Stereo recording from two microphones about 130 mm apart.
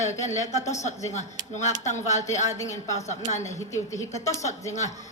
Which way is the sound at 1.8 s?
65° left (ahead or behind).